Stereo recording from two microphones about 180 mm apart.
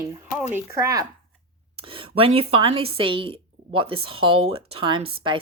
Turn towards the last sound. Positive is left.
turn(degrees=-25)  # may be behind; listen again after turning